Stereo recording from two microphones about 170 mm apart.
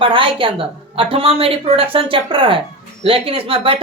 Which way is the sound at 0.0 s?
30° right (ahead or behind).